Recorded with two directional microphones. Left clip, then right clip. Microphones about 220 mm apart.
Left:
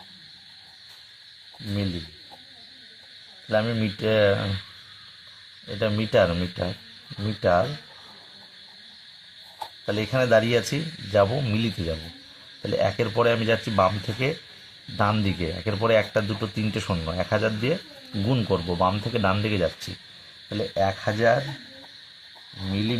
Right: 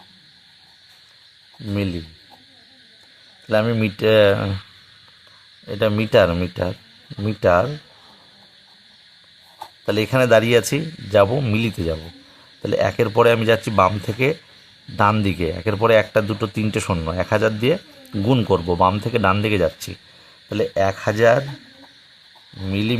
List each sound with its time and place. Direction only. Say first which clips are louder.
3.5 s speech: right 5 dB; 40° right (ahead or behind)
5.6 s speech: right 6 dB; 35° right (ahead or behind)
9.8 s speech: right 6 dB; 35° right (ahead or behind)